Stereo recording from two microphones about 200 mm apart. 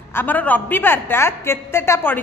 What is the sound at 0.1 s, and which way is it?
A woman's voice, 10° left (ahead or behind).